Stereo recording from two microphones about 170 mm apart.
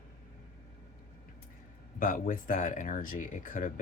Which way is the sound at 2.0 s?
50° left (ahead or behind).